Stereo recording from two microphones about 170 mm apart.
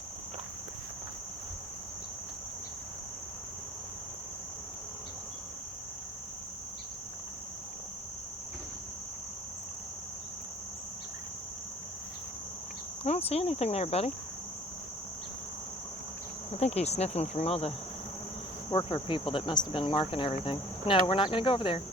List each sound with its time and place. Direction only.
13.1 s speech: 35° left (ahead or behind)
16.5 s speech: 40° left (ahead or behind)